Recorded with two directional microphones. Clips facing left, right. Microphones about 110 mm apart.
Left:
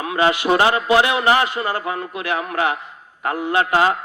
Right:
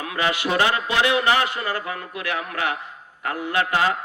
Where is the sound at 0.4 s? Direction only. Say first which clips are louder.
Left 5 dB; 40° left (ahead or behind).